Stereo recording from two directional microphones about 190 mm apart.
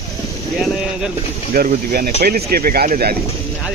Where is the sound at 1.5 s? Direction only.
50° right (ahead or behind).